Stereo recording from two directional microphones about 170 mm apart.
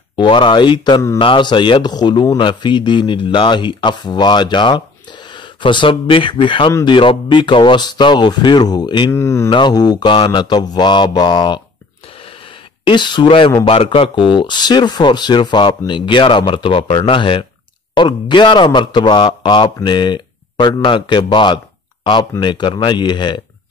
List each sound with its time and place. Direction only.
0.1 s speech: 30° left (ahead or behind)
9.1 s speech: 15° left (ahead or behind)
9.5 s speech: 25° left (ahead or behind)
12.8 s speech: 25° left (ahead or behind)